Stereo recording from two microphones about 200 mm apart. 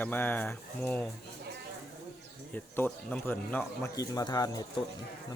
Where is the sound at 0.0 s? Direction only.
10° left (ahead or behind).